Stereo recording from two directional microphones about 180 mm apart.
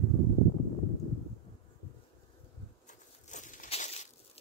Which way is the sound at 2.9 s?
45° left (ahead or behind).